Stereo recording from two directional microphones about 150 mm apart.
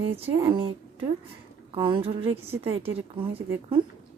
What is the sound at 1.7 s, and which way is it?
Speech, 30° right (ahead or behind).